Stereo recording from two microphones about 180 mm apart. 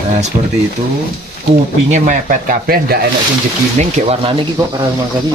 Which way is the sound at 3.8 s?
35° right (ahead or behind).